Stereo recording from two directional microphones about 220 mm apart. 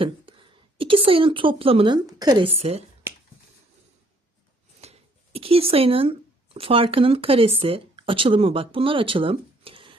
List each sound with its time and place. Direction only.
0.0 s speech: 25° right (ahead or behind)
4.8 s speech: 30° right (ahead or behind)